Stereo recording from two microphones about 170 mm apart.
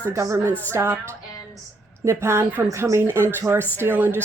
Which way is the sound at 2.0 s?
15° right (ahead or behind).